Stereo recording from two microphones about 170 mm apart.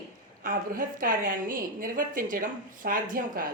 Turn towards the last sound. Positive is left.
turn(degrees=-55)  # may be behind; listen again after turning